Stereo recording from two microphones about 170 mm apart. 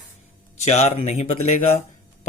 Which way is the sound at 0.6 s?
40° left (ahead or behind).